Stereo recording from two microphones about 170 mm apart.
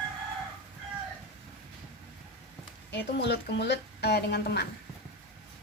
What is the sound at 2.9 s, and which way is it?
Speech, 80° left.